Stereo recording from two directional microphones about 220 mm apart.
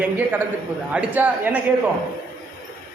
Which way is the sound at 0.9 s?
5° right (ahead or behind).